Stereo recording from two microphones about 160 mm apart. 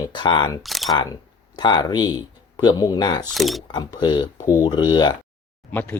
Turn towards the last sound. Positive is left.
turn(degrees=10)  # may be behind; listen again after turning